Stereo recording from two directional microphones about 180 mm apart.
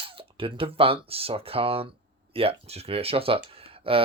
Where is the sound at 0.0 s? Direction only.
30° right (ahead or behind).